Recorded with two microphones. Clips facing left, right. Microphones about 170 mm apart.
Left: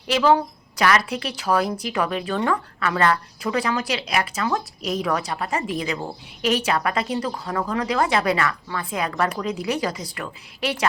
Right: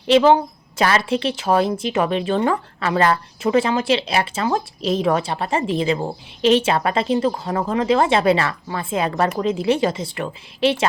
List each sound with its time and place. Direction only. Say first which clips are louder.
0.1 s speech: right 5 dB; 25° right (ahead or behind)